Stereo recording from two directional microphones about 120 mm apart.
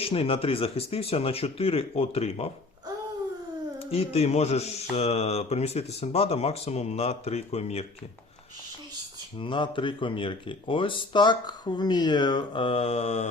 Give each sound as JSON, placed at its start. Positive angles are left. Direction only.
{"t": 0.0, "sound": "speech", "side_deg": 50}
{"t": 3.9, "sound": "speech", "side_deg": 55}
{"t": 9.4, "sound": "speech", "side_deg": 45}